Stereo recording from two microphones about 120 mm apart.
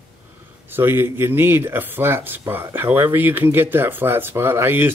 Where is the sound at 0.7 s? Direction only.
20° right (ahead or behind).